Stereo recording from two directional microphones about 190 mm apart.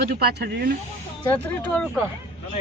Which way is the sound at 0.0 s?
55° right (ahead or behind).